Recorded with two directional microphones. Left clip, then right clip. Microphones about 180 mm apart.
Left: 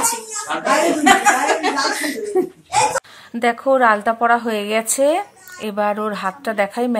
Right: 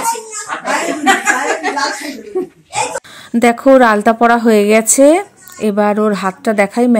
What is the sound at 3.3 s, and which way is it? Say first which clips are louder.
Speech: right 8 dB; 30° right (ahead or behind).